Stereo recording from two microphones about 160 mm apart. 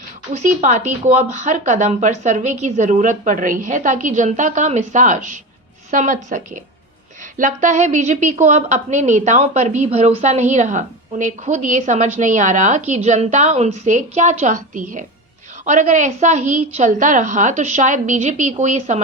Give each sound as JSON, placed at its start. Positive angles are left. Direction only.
{"t": 0.6, "sound": "a woman's voice", "side_deg": -50}